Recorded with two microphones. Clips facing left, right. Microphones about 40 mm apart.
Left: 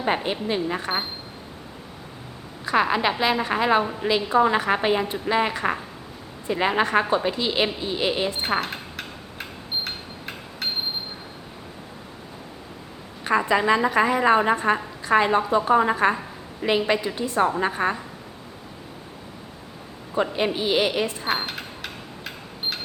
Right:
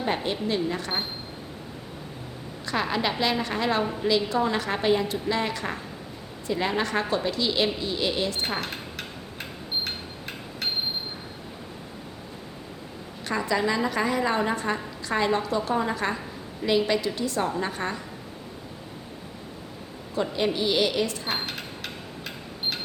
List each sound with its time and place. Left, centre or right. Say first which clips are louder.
0.0 s a woman's voice: left 3 dB; left
2.6 s a woman's voice: left 5 dB; centre
8.6 s a sound: left 2 dB; centre
13.2 s a woman's voice: left 5 dB; left
20.1 s a woman's voice: left 2 dB; left
21.2 s mechanisms: left 4 dB; centre